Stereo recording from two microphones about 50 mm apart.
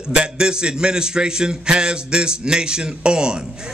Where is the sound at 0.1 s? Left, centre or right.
Centre.